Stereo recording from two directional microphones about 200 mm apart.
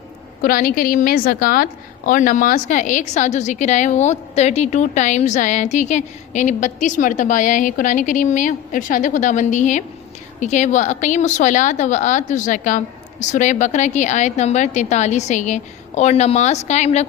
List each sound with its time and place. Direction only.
0.4 s a woman's voice: 45° left (ahead or behind)